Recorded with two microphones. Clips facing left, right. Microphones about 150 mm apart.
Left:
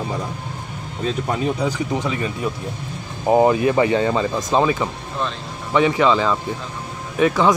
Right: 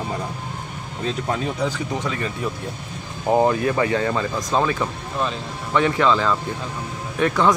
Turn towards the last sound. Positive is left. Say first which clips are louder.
# left 2 dB
turn(degrees=5)  # may be behind; listen again after turning